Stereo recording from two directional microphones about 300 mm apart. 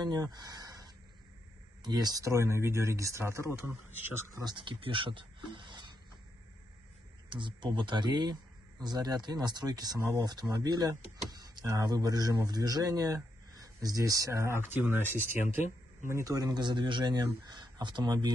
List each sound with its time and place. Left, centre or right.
0.0 s a sound: centre
1.8 s speech: centre
7.2 s speech: centre
15.4 s speech: left
16.1 s speech: centre